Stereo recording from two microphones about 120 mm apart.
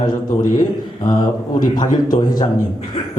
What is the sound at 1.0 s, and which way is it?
A man's voice, 35° left (ahead or behind).